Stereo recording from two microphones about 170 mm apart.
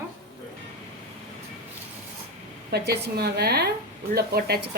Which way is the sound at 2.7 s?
75° right (ahead or behind).